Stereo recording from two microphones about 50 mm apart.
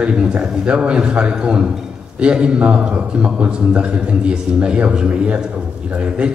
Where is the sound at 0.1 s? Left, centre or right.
Centre.